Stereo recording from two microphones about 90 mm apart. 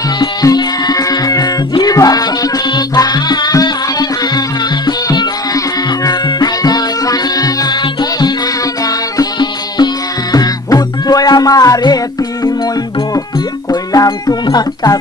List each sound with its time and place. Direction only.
0.2 s music: 50° left (ahead or behind)
6.0 s music: 45° left (ahead or behind)
9.2 s music: 50° left (ahead or behind)
13.7 s music: 45° left (ahead or behind)